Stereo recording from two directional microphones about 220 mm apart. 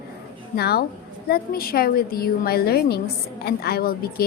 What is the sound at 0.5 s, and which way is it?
A woman's voice, 45° left (ahead or behind).